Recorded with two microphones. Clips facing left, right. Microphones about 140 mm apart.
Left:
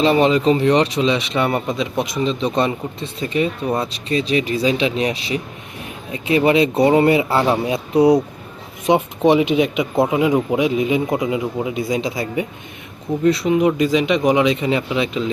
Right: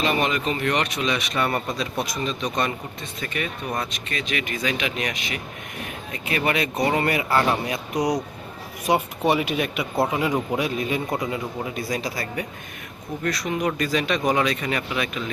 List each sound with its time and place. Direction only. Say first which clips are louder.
0.0 s a man's voice: left 9 dB; 30° left (ahead or behind)